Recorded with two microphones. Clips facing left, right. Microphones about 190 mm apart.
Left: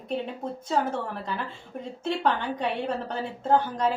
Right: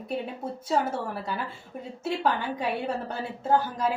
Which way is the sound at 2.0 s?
5° right (ahead or behind).